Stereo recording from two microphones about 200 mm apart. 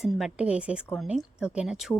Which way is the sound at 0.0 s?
5° right (ahead or behind).